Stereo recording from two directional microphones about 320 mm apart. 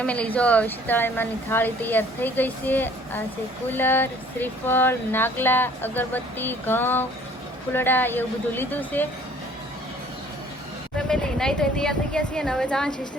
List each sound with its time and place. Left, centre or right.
0.0 s a woman's voice: centre
10.9 s speech: centre